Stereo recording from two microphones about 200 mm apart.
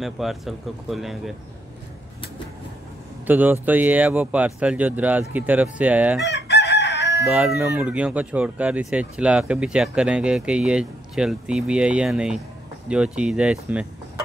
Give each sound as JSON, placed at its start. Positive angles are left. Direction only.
{"t": 0.0, "sound": "speech", "side_deg": 0}
{"t": 3.3, "sound": "speech", "side_deg": -10}
{"t": 6.2, "sound": "chicken", "side_deg": 55}
{"t": 7.2, "sound": "speech", "side_deg": -5}